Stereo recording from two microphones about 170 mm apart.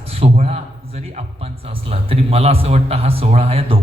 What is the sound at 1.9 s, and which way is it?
A man's voice, 35° right (ahead or behind).